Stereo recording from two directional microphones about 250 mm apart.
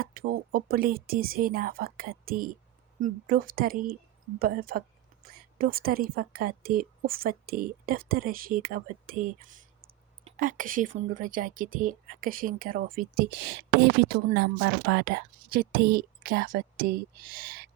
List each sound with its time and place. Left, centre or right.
0.0 s a woman's voice: right